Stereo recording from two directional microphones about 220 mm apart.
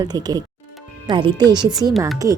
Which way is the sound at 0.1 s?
20° right (ahead or behind).